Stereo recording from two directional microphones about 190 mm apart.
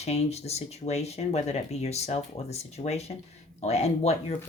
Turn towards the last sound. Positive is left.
turn(degrees=35)  # may be behind; listen again after turning